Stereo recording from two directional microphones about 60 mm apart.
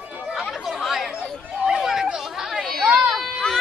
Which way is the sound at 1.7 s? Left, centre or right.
Centre.